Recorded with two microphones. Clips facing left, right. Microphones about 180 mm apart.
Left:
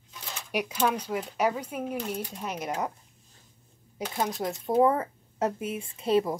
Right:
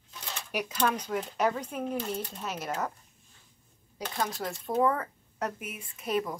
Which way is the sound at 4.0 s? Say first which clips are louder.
Left 3 dB; 20° left (ahead or behind).